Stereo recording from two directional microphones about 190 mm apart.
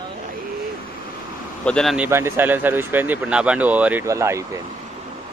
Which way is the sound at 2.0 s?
15° right (ahead or behind).